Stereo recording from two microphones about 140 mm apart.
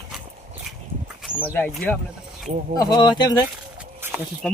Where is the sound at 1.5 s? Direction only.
10° left (ahead or behind).